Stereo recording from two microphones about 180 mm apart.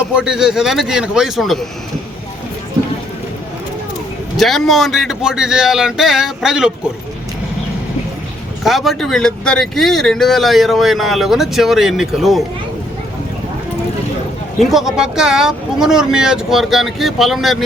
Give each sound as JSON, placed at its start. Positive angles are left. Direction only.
{"t": 0.1, "sound": "speech", "side_deg": -5}
{"t": 4.4, "sound": "speech", "side_deg": 0}
{"t": 8.6, "sound": "speech", "side_deg": 0}
{"t": 14.6, "sound": "speech", "side_deg": 0}